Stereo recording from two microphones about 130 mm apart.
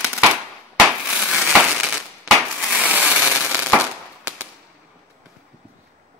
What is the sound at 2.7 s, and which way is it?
Fireworks, 10° right (ahead or behind).